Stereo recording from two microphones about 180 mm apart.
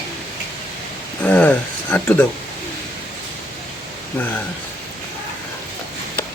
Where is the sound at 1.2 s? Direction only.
10° left (ahead or behind).